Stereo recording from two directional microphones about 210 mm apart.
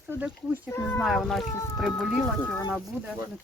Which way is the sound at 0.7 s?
10° left (ahead or behind).